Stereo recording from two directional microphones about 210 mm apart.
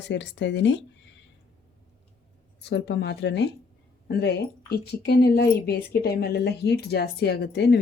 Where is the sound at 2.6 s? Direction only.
55° left (ahead or behind).